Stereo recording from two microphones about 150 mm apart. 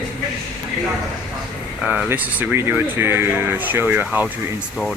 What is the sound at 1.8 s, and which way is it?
Speech, 10° right (ahead or behind).